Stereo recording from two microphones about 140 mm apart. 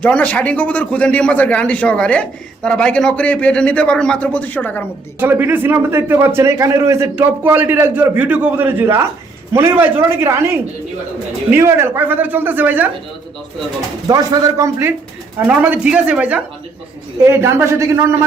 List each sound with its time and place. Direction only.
0.0 s a man's voice: 10° left (ahead or behind)
5.2 s a man's voice: 15° right (ahead or behind)
14.1 s a man's voice: 30° right (ahead or behind)
15.4 s a man's voice: 10° right (ahead or behind)
17.2 s a man's voice: 20° right (ahead or behind)